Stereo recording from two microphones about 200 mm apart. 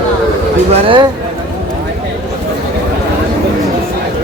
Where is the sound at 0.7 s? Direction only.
25° right (ahead or behind).